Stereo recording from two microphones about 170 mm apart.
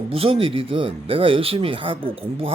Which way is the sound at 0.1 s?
35° right (ahead or behind).